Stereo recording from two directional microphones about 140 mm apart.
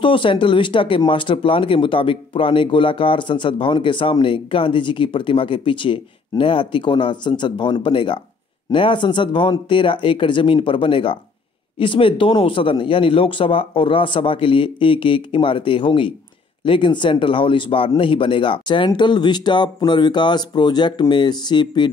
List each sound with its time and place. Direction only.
0.0 s speech: 35° left (ahead or behind)